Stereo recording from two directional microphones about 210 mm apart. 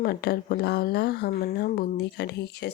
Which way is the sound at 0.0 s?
45° left (ahead or behind).